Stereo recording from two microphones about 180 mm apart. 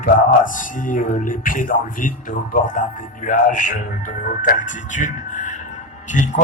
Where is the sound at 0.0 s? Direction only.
45° left (ahead or behind).